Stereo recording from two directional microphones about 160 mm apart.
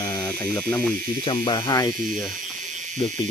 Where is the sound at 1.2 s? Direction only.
30° left (ahead or behind).